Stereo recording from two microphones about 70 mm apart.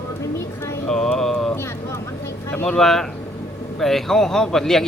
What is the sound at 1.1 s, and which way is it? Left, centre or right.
Music, centre.